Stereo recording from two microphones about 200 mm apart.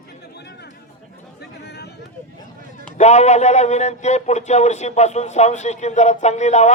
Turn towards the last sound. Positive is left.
turn(degrees=35)  # may be behind; listen again after turning